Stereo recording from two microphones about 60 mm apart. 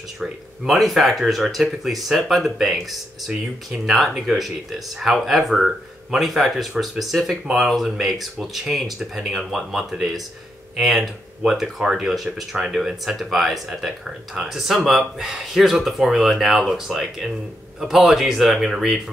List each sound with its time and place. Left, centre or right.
0.2 s speech: centre